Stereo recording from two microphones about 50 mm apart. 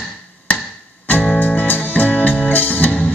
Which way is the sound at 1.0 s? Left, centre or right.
Left.